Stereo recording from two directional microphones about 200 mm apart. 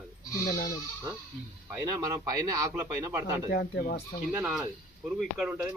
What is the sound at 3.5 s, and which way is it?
Speech, 55° left (ahead or behind).